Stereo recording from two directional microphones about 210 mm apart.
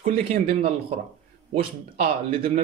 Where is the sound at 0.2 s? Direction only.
25° right (ahead or behind).